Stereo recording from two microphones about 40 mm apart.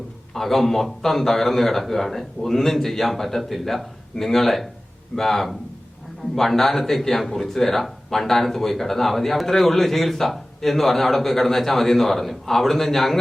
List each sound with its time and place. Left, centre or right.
0.3 s a man's voice: centre